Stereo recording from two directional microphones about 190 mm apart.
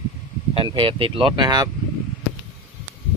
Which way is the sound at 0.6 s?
25° right (ahead or behind).